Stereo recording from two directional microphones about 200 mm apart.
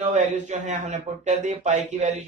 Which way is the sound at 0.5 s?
35° right (ahead or behind).